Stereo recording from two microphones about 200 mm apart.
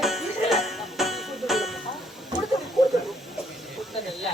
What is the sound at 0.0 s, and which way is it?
Music, centre (ahead or behind).